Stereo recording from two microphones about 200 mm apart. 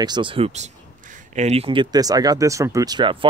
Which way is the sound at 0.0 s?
25° right (ahead or behind).